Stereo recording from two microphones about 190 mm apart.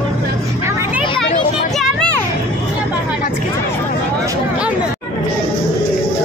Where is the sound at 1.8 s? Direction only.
5° left (ahead or behind).